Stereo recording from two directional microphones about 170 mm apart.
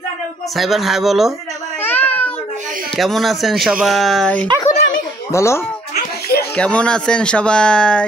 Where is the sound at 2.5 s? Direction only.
55° right (ahead or behind).